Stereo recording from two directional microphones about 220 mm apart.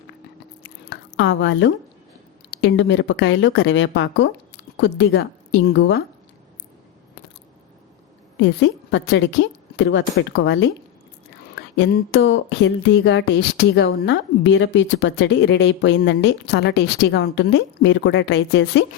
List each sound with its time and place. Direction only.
0.6 s a sound: 55° left (ahead or behind)
2.6 s a woman's voice: 55° left (ahead or behind)
8.4 s a woman's voice: 55° left (ahead or behind)
11.8 s speech: 50° left (ahead or behind)